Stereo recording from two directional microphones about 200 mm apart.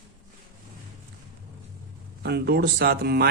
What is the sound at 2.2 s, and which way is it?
Speech, 55° right (ahead or behind).